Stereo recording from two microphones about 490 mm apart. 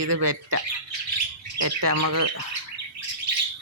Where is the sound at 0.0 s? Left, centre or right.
Right.